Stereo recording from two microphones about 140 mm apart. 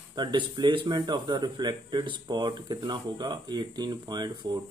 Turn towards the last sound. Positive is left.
turn(degrees=-30)  # may be behind; listen again after turning